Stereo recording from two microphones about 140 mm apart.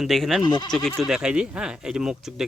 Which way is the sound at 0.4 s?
30° left (ahead or behind).